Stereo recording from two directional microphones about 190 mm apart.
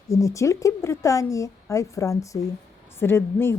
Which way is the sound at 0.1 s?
15° left (ahead or behind).